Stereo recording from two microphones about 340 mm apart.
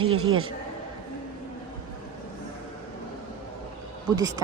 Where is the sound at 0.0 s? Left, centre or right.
Right.